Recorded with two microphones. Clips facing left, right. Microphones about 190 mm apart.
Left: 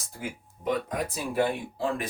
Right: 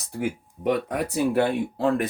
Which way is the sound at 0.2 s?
65° right (ahead or behind).